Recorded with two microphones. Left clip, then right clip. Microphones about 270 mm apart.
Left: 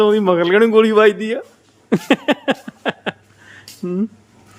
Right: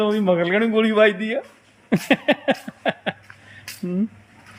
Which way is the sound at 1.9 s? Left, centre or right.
Centre.